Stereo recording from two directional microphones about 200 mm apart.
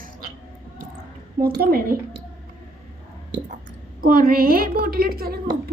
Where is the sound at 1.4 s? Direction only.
50° right (ahead or behind).